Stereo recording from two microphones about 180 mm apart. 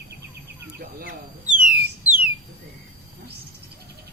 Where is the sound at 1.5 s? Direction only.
5° right (ahead or behind).